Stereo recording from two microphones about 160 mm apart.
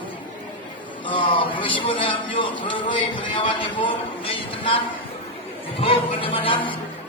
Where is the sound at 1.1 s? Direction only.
30° left (ahead or behind).